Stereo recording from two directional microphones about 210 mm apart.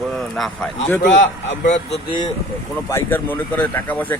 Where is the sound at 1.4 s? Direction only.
35° left (ahead or behind).